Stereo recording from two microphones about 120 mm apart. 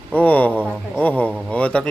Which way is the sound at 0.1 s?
10° left (ahead or behind).